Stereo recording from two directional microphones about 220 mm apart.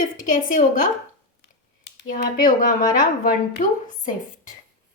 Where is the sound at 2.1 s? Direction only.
35° left (ahead or behind).